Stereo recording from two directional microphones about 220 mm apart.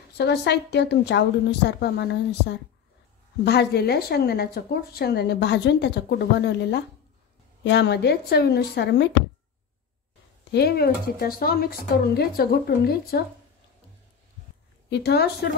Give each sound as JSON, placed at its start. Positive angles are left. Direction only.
{"t": 0.2, "sound": "speech", "side_deg": 50}
{"t": 10.5, "sound": "speech", "side_deg": 45}
{"t": 14.9, "sound": "speech", "side_deg": 50}